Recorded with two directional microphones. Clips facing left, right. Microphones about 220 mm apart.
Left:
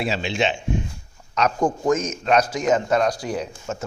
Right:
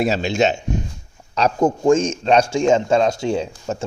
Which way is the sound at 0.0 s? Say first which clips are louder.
Right 5 dB; 45° right (ahead or behind).